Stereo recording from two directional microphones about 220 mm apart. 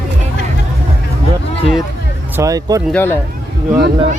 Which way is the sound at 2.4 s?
15° right (ahead or behind).